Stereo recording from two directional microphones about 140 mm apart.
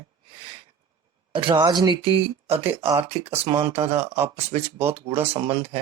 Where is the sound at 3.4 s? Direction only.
35° right (ahead or behind).